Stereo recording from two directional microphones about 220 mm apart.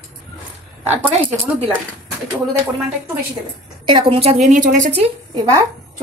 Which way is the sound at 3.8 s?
25° right (ahead or behind).